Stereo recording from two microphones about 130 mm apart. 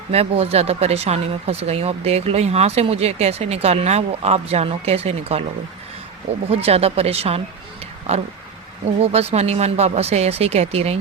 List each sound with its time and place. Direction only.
0.1 s speech: 50° right (ahead or behind)
6.5 s speech: 50° right (ahead or behind)
9.0 s speech: 50° right (ahead or behind)